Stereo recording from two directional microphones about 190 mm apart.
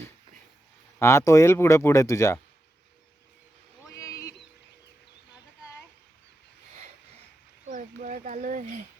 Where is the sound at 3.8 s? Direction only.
15° left (ahead or behind).